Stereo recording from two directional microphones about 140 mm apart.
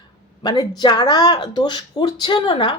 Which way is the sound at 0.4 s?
30° left (ahead or behind).